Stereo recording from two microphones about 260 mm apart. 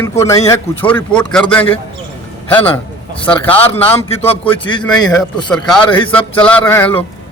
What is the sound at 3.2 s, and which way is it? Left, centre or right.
A man's voice, centre.